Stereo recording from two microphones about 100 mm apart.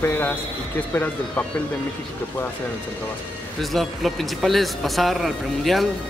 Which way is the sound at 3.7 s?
Centre (ahead or behind).